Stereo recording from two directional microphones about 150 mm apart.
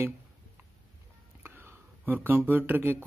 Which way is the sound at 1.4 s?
15° right (ahead or behind).